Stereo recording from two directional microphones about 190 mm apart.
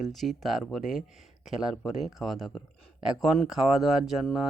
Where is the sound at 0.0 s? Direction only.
Centre (ahead or behind).